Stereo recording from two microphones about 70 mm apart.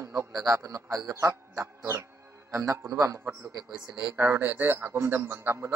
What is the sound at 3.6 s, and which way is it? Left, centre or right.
Speech, centre.